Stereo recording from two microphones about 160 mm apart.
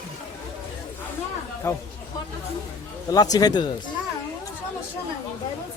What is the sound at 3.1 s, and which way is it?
Speech, 25° left (ahead or behind).